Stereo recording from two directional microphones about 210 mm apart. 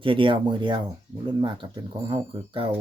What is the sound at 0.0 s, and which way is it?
Speech, 25° right (ahead or behind).